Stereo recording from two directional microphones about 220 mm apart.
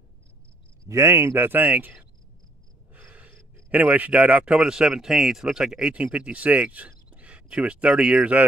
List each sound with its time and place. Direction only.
0.8 s speech: 10° right (ahead or behind)